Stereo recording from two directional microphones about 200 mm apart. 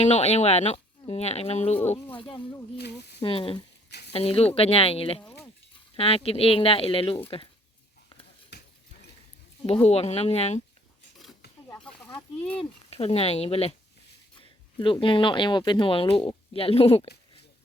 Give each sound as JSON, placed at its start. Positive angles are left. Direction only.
{"t": 0.0, "sound": "speech", "side_deg": 35}
{"t": 2.7, "sound": "speech", "side_deg": 55}
{"t": 3.2, "sound": "speech", "side_deg": 25}
{"t": 3.8, "sound": "a sound", "side_deg": 55}
{"t": 4.1, "sound": "speech", "side_deg": 30}
{"t": 8.5, "sound": "stir", "side_deg": 55}
{"t": 9.6, "sound": "speech", "side_deg": 30}
{"t": 11.7, "sound": "snake", "side_deg": 5}
{"t": 12.5, "sound": "speech", "side_deg": 30}
{"t": 14.8, "sound": "speech", "side_deg": 25}